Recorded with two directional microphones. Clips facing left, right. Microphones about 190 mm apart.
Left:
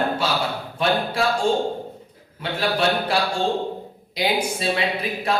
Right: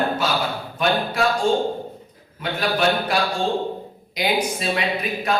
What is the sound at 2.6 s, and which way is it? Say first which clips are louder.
A man's voice: right 1 dB; 30° left (ahead or behind).